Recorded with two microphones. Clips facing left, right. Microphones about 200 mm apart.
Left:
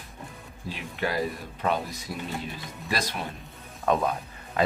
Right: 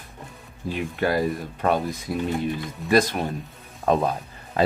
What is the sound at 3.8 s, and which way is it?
Speech, 35° right (ahead or behind).